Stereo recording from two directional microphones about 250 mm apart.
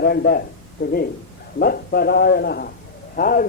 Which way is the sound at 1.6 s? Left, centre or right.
Left.